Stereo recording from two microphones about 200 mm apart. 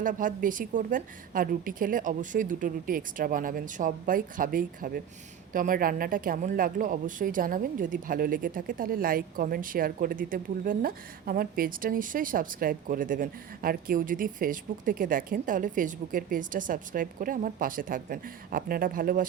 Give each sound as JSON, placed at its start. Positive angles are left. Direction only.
{"t": 0.0, "sound": "speech", "side_deg": -45}